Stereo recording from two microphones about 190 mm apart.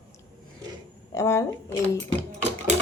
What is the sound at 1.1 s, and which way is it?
Speech, 15° left (ahead or behind).